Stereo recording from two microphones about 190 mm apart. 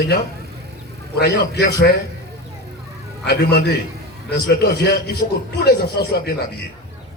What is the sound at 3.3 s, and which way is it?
A man's voice, 60° left (ahead or behind).